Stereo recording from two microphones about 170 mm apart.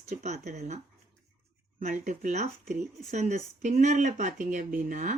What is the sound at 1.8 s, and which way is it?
Speech, 50° right (ahead or behind).